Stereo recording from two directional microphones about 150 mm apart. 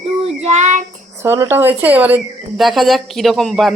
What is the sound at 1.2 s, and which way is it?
A woman's voice, 20° right (ahead or behind).